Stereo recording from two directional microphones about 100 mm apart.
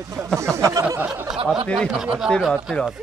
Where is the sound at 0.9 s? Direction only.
20° right (ahead or behind).